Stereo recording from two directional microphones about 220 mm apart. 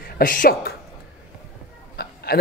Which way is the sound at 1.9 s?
45° left (ahead or behind).